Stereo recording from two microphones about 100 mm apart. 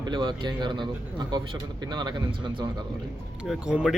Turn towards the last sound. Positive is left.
turn(degrees=-10)  # may be behind; listen again after turning